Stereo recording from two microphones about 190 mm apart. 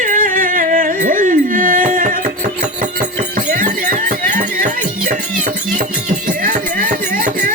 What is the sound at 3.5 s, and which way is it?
Music, 45° right (ahead or behind).